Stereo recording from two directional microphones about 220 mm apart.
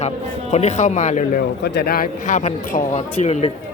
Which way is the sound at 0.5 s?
30° left (ahead or behind).